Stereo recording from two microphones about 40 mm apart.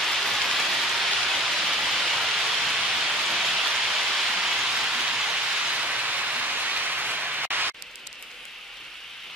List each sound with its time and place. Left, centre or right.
0.0 s rain: centre; by 5.9 s right
5.9 s a sound: right
6.4 s rain: right